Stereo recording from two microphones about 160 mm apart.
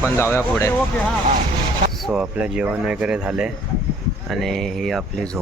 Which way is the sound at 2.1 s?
5° right (ahead or behind).